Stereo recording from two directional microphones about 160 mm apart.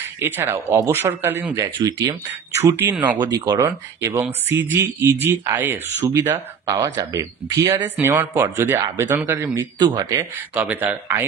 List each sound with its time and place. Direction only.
0.0 s speech: 15° right (ahead or behind)
3.2 s speech: 25° right (ahead or behind)
10.6 s speech: 10° right (ahead or behind)